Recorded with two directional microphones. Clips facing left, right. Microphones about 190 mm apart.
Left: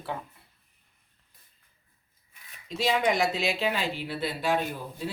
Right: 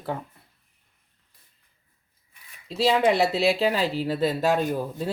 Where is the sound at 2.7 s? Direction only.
35° right (ahead or behind).